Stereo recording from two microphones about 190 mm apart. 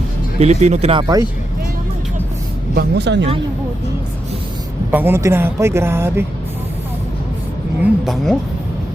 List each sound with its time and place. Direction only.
0.3 s speech: 35° right (ahead or behind); by 1.3 s 20° right (ahead or behind)
2.7 s speech: 60° right (ahead or behind)
4.9 s speech: 10° right (ahead or behind)
7.8 s speech: centre (ahead or behind)